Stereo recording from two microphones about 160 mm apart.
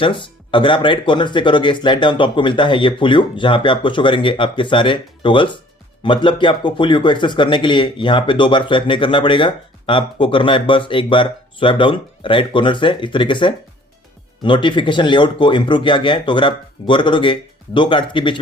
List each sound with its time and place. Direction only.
0.0 s speech: 30° left (ahead or behind)